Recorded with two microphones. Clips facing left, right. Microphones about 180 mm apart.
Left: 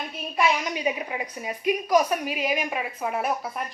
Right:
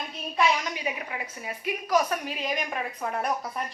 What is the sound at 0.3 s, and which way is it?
A woman's voice, 15° left (ahead or behind).